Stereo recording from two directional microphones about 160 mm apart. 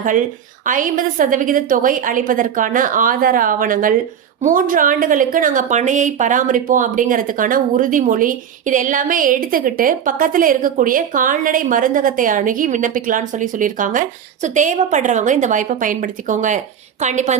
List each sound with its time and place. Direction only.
0.0 s a woman's voice: 55° right (ahead or behind)